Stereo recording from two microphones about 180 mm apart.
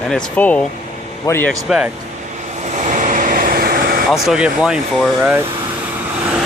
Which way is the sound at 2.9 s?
45° right (ahead or behind).